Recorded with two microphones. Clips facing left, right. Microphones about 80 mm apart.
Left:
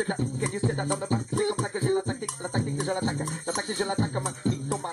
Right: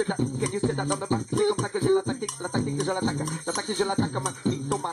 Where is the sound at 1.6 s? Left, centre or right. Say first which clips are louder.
Right 3 dB; right.